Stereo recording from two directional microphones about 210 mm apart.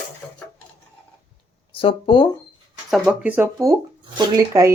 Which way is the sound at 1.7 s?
25° left (ahead or behind).